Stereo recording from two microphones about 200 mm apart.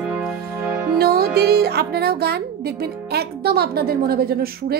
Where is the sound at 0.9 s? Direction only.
50° right (ahead or behind).